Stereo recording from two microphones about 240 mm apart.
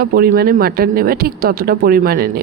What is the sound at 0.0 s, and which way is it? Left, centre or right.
A woman's voice, right.